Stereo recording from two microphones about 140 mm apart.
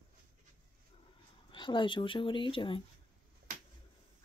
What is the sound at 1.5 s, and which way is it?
Speech, 35° left (ahead or behind).